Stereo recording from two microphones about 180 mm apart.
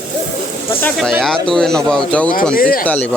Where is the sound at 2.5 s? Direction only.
55° left (ahead or behind).